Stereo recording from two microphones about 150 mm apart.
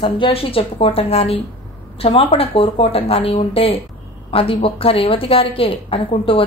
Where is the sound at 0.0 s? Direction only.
35° left (ahead or behind).